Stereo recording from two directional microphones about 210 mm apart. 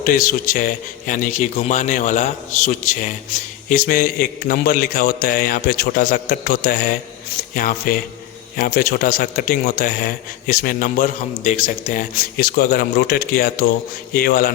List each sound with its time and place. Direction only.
0.0 s a man's voice: 40° left (ahead or behind)